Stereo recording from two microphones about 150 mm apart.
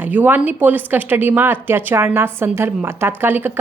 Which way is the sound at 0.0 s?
10° right (ahead or behind).